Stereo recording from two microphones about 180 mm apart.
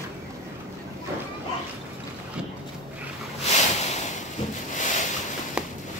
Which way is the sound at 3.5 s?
40° left (ahead or behind).